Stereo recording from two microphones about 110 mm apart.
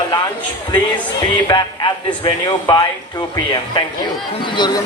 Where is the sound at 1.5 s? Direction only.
40° left (ahead or behind).